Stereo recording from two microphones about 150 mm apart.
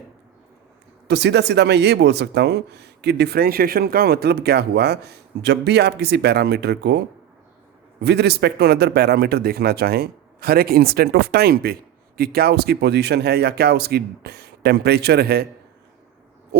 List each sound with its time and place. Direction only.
1.0 s a man's voice: 90° right
8.0 s a man's voice: 90° right